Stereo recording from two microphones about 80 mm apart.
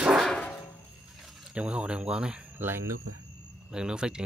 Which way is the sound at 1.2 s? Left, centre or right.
Centre.